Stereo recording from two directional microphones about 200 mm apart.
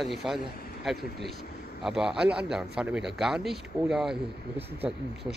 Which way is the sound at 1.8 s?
Centre (ahead or behind).